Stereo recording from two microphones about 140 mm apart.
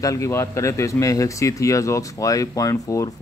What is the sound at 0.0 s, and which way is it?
Speech, 25° left (ahead or behind).